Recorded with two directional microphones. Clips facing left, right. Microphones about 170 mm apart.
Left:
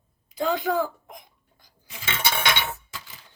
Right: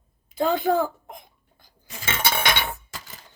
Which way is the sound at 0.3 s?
50° right (ahead or behind).